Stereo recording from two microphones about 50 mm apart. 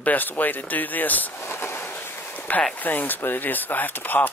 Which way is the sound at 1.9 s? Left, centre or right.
Left.